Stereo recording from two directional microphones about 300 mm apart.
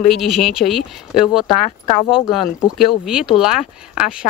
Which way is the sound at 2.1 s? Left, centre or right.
Centre.